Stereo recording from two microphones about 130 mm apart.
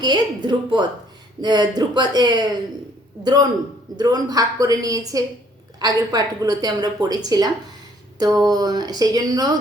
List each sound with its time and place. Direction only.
0.0 s a woman's voice: 35° right (ahead or behind)